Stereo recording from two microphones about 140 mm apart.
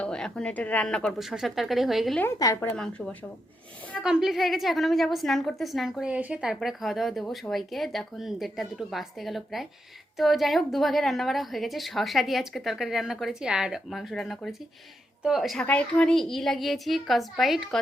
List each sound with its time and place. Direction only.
0.0 s a woman's voice: 5° left (ahead or behind)
2.4 s a woman's voice: 25° left (ahead or behind)
2.7 s a woman's voice: 5° left (ahead or behind)